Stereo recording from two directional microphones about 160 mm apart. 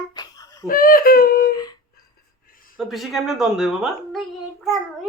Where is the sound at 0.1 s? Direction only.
25° left (ahead or behind).